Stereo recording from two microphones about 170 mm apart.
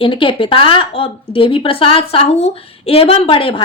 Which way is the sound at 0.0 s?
30° left (ahead or behind).